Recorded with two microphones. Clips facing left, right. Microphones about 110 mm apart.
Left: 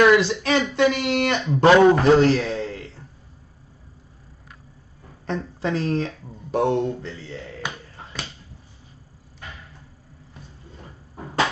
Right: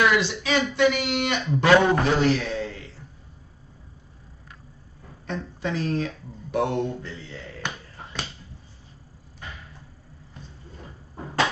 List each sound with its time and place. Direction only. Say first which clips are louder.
0.0 s speech: left 6 dB; 45° left (ahead or behind)
5.2 s speech: left 4 dB; 35° left (ahead or behind)